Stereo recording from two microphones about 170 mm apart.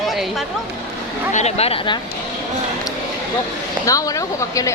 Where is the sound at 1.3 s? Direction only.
40° left (ahead or behind).